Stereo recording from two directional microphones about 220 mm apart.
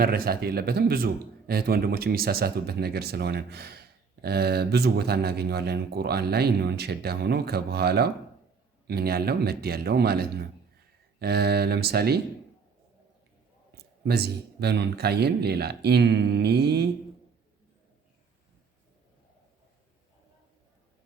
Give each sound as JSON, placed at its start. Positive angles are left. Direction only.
{"t": 0.0, "sound": "speech", "side_deg": -40}
{"t": 13.7, "sound": "speech", "side_deg": -45}